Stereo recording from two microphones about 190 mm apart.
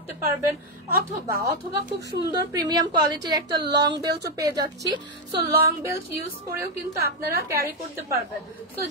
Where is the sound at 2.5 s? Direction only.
20° right (ahead or behind).